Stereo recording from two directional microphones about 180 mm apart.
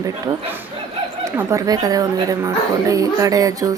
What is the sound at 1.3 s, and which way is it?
Speech, 20° right (ahead or behind).